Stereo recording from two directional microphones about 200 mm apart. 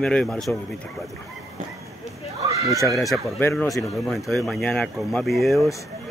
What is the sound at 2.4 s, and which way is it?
Neigh, 15° right (ahead or behind).